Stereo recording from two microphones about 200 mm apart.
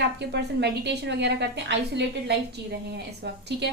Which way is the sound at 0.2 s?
55° right (ahead or behind).